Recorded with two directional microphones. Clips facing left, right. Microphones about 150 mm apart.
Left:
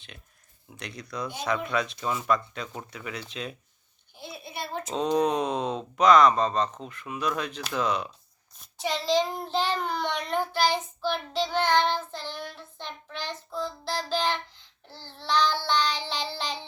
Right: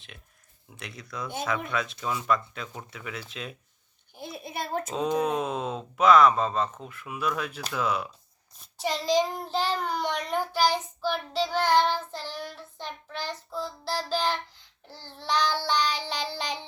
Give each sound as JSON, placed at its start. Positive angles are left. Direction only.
{"t": 0.7, "sound": "speech", "side_deg": 0}
{"t": 4.1, "sound": "a sound", "side_deg": -50}
{"t": 4.9, "sound": "speech", "side_deg": -5}
{"t": 9.0, "sound": "child singing", "side_deg": -15}